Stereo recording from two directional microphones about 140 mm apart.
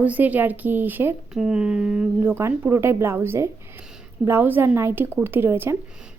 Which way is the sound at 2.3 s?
20° right (ahead or behind).